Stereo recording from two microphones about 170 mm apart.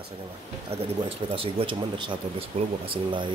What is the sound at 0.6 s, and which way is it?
Speech, 35° right (ahead or behind).